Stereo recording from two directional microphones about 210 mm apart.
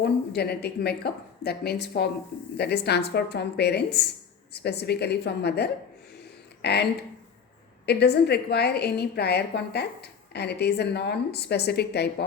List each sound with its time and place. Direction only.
0.0 s a woman's voice: 50° left (ahead or behind)
7.9 s a woman's voice: 50° left (ahead or behind)